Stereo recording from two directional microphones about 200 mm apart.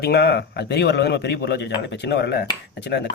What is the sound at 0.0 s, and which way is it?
A man's voice, 55° left (ahead or behind).